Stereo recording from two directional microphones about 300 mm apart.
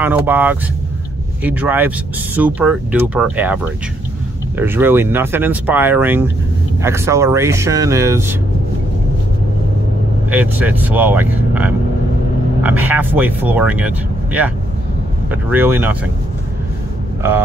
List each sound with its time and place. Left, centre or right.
0.0 s speech: centre
10.3 s speech: centre
15.5 s speech: centre